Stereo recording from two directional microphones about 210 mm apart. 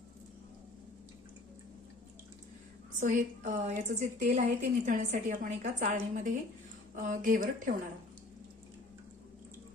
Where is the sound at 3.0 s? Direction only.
35° right (ahead or behind).